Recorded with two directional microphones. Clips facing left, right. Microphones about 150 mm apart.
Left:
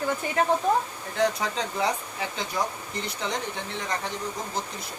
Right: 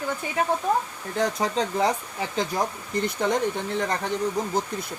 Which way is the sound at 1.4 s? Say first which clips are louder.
Right 4 dB; 40° right (ahead or behind).